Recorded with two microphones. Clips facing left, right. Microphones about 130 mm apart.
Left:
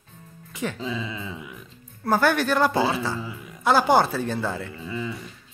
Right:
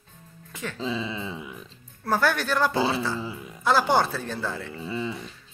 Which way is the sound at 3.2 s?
25° right (ahead or behind).